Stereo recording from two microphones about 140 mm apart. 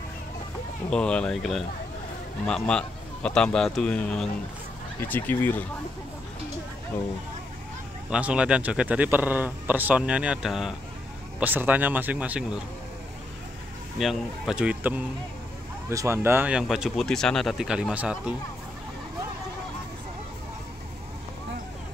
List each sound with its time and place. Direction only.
0.8 s a man's voice: 5° left (ahead or behind)
8.1 s a man's voice: 10° right (ahead or behind)
11.3 s a man's voice: 15° right (ahead or behind)
13.9 s a man's voice: centre (ahead or behind)
15.9 s a man's voice: 20° right (ahead or behind)
16.5 s a man's voice: 5° right (ahead or behind)